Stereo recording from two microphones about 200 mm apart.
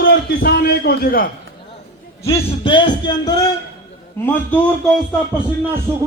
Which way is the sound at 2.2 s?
25° left (ahead or behind).